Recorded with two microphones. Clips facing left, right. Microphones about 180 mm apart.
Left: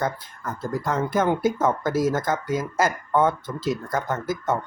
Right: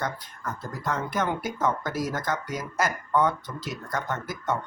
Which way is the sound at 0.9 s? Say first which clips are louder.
Left 5 dB; 25° left (ahead or behind).